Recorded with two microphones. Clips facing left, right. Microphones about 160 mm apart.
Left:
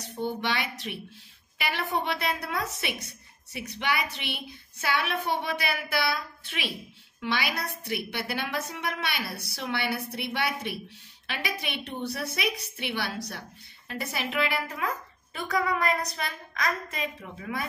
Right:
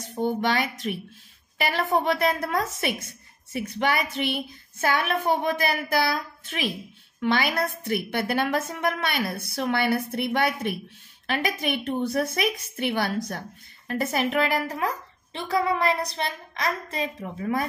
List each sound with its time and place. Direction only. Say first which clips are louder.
0.2 s a woman's voice: right 6 dB; 45° right (ahead or behind)
15.3 s a woman's voice: right 3 dB; 25° right (ahead or behind)